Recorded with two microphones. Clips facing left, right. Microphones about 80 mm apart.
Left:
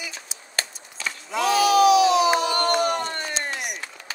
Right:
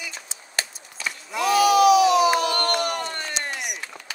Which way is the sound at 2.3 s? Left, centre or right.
Centre.